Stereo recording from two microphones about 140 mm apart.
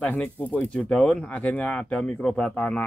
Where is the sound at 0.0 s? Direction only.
10° left (ahead or behind).